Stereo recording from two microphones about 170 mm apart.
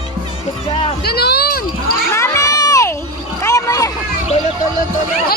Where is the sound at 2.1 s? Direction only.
15° left (ahead or behind).